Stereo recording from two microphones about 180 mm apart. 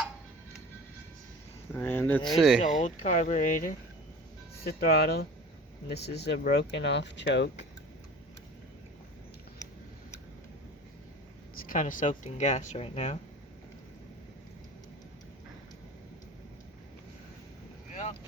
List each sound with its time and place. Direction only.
1.7 s speech: 10° left (ahead or behind)
2.8 s speech: 40° left (ahead or behind)
4.6 s speech: 60° left (ahead or behind); by 7.7 s 75° left (ahead or behind)
11.5 s speech: 50° left (ahead or behind)